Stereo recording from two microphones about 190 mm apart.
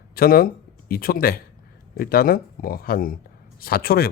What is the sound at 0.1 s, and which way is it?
Speech, 50° left (ahead or behind).